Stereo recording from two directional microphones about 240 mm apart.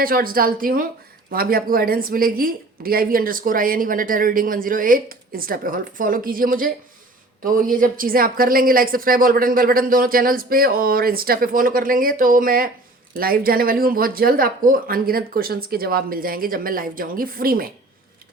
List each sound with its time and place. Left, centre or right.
0.0 s a woman's voice: right